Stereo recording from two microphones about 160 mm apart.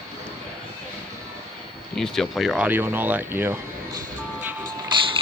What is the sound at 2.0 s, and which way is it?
Speech, centre (ahead or behind).